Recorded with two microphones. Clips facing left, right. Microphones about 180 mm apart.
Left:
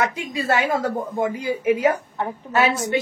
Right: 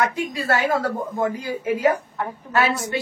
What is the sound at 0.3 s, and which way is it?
A woman's voice, 20° left (ahead or behind).